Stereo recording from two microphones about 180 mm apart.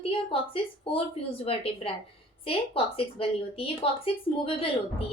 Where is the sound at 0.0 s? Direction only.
30° left (ahead or behind).